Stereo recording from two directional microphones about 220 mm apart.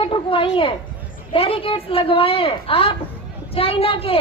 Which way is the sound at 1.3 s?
25° left (ahead or behind).